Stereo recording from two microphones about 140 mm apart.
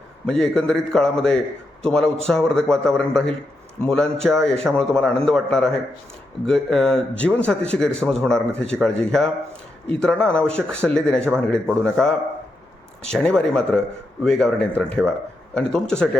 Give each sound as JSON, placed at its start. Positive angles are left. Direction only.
{"t": 0.3, "sound": "a man's voice", "side_deg": 5}